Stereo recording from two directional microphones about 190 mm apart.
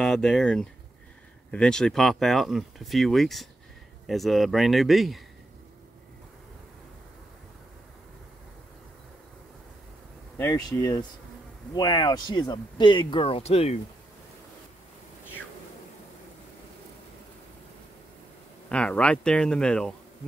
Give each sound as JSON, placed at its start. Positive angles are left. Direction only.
{"t": 0.0, "sound": "speech", "side_deg": 5}
{"t": 10.3, "sound": "speech", "side_deg": 15}
{"t": 18.7, "sound": "speech", "side_deg": 5}